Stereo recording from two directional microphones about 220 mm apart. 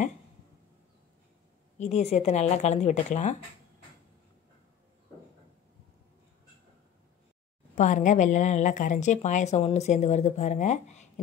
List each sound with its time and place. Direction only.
1.8 s a woman's voice: 30° left (ahead or behind)
7.7 s a woman's voice: 35° left (ahead or behind)